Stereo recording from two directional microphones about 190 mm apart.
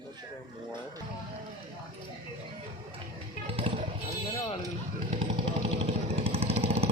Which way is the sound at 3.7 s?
25° right (ahead or behind).